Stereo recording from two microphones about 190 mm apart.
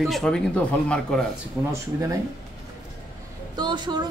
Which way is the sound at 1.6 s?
10° right (ahead or behind).